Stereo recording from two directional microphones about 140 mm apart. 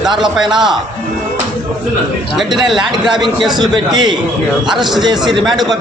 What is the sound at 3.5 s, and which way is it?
A man's voice, 30° right (ahead or behind).